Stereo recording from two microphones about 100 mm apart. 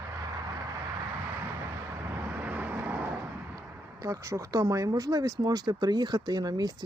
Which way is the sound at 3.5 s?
35° right (ahead or behind).